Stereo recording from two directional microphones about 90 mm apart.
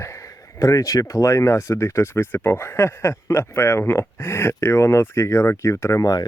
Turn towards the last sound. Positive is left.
turn(degrees=35)  # may be behind; listen again after turning